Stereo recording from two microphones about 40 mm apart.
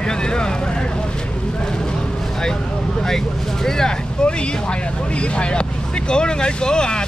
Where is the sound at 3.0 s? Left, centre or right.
Centre.